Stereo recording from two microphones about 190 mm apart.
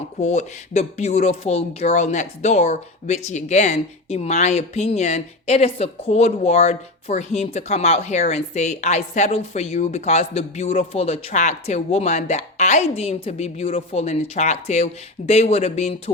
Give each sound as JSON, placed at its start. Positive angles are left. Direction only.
{"t": 0.2, "sound": "speech", "side_deg": 35}